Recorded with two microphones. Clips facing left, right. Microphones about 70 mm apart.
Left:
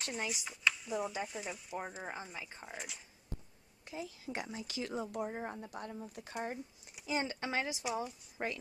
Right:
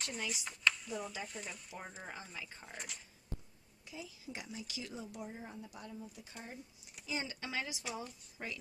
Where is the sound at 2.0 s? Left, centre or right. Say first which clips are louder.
Left 3 dB; left.